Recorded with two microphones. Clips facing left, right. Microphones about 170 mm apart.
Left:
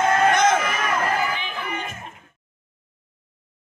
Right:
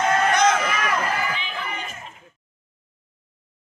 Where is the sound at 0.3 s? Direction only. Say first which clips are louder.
Left 1 dB; 50° left (ahead or behind).